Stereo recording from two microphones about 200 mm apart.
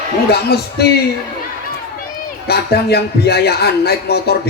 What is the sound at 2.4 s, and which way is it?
A man's voice, 50° left (ahead or behind).